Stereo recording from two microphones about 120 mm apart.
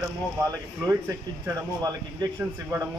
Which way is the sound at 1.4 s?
25° right (ahead or behind).